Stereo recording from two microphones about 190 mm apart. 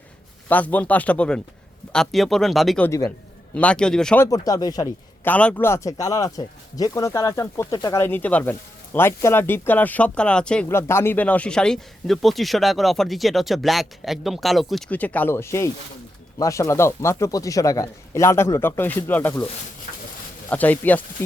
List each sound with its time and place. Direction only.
0.4 s speech: 10° left (ahead or behind)
5.3 s speech: 5° left (ahead or behind)
20.5 s speech: 10° left (ahead or behind)